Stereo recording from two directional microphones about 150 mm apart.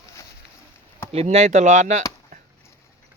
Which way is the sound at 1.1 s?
45° right (ahead or behind).